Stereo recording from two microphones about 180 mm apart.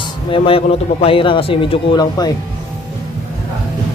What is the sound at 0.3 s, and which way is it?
Speech, 30° left (ahead or behind).